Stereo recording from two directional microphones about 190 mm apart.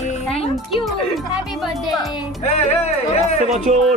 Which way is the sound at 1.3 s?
Centre (ahead or behind).